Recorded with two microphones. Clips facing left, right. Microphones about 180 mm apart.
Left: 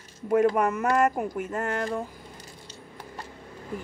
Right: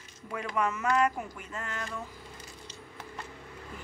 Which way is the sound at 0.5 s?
50° left (ahead or behind).